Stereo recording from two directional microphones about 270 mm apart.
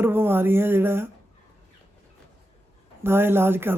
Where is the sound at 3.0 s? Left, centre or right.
Centre.